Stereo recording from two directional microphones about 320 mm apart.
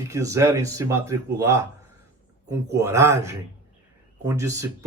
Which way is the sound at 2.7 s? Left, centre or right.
Centre.